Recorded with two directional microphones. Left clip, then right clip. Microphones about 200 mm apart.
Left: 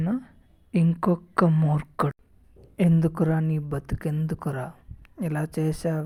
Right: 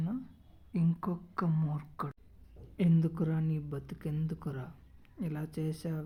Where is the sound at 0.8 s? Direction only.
25° left (ahead or behind).